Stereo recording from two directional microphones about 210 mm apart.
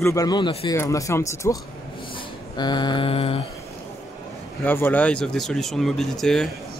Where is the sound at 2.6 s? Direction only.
20° left (ahead or behind).